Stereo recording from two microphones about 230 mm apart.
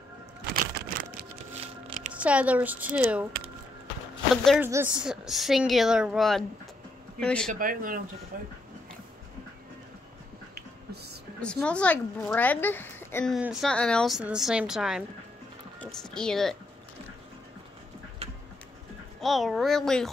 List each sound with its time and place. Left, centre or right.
2.1 s speech: centre
3.8 s a sound: centre
4.6 s speech: centre
7.5 s speech: right
11.4 s speech: centre
18.2 s a sound: right
19.2 s speech: centre